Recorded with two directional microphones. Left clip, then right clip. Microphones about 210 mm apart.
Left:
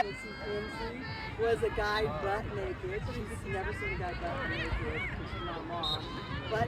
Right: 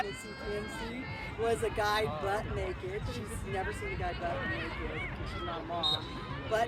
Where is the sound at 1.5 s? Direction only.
55° right (ahead or behind).